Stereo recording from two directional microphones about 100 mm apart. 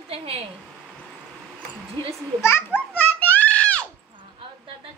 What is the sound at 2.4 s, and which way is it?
Children playing, 25° left (ahead or behind).